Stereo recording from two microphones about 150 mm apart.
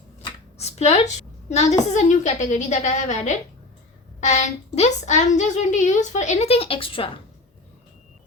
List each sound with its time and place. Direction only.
0.6 s a woman's voice: 45° left (ahead or behind)